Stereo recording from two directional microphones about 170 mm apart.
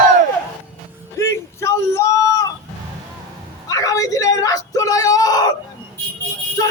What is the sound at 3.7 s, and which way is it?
Speech, 20° left (ahead or behind).